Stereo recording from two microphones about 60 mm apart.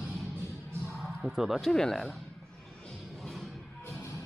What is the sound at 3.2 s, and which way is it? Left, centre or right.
Music, centre.